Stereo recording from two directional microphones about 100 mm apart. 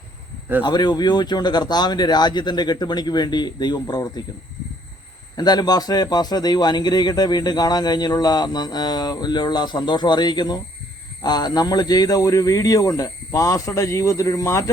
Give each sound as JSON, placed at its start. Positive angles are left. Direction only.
{"t": 0.6, "sound": "a man's voice", "side_deg": 45}
{"t": 5.4, "sound": "a man's voice", "side_deg": 45}